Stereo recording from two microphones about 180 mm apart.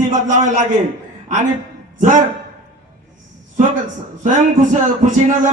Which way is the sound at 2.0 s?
45° right (ahead or behind).